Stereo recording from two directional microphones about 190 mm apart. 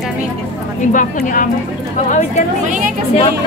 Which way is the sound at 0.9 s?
45° left (ahead or behind).